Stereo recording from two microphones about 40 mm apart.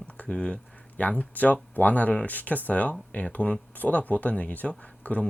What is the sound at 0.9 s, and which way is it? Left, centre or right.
Speech, left.